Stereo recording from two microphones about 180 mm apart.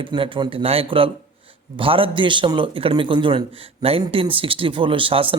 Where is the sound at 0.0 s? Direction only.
30° right (ahead or behind).